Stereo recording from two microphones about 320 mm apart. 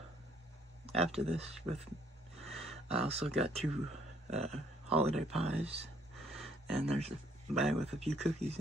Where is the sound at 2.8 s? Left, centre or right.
Centre.